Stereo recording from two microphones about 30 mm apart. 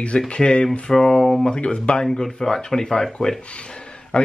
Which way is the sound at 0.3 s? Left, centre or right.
Left.